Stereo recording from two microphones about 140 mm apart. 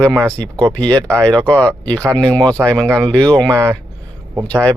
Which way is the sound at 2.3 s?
30° right (ahead or behind).